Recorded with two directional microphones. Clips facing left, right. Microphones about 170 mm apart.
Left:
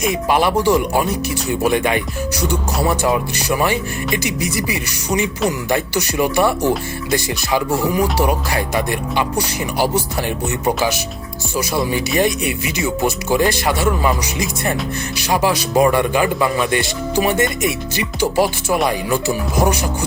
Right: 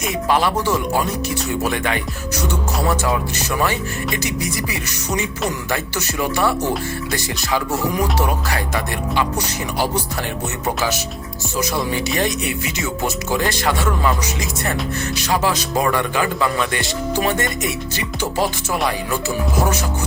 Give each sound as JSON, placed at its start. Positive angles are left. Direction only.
{"t": 0.0, "sound": "speech", "side_deg": 15}
{"t": 5.7, "sound": "speech", "side_deg": 15}
{"t": 10.8, "sound": "speech", "side_deg": 10}
{"t": 15.2, "sound": "speech", "side_deg": 15}